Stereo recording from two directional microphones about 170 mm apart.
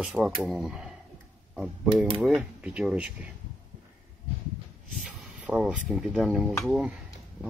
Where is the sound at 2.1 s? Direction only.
Centre (ahead or behind).